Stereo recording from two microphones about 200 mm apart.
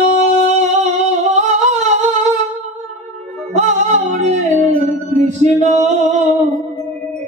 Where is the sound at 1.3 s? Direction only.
35° right (ahead or behind).